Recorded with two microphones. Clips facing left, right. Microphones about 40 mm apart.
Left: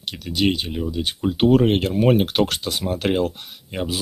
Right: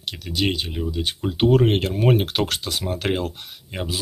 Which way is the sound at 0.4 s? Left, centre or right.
Centre.